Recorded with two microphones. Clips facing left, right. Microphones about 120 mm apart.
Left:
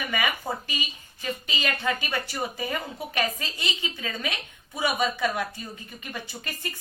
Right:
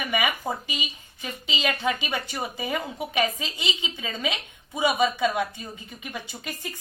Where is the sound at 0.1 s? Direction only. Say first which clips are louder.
Right 3 dB; 15° right (ahead or behind).